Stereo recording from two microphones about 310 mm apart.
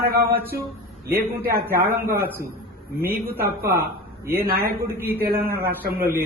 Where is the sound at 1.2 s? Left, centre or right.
Right.